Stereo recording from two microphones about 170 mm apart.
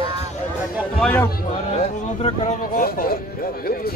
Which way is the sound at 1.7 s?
35° left (ahead or behind).